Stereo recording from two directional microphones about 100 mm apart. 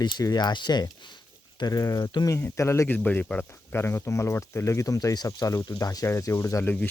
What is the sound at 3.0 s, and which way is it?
Speech, 15° left (ahead or behind).